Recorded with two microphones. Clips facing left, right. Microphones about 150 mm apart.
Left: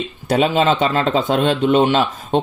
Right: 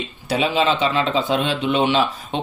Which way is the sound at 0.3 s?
45° left (ahead or behind).